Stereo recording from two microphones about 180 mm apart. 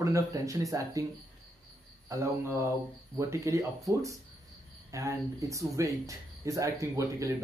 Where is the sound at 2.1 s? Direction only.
15° right (ahead or behind).